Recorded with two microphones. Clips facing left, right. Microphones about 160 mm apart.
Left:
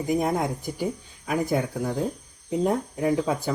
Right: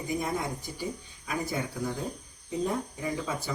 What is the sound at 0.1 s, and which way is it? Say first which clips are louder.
Speech: left 7 dB; 55° left (ahead or behind).